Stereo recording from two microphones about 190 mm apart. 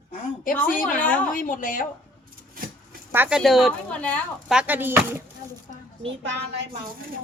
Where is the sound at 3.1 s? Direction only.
10° right (ahead or behind).